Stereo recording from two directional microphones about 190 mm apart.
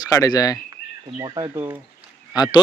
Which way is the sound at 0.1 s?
20° left (ahead or behind).